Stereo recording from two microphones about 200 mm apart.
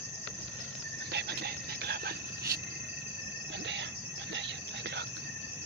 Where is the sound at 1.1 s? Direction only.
55° right (ahead or behind).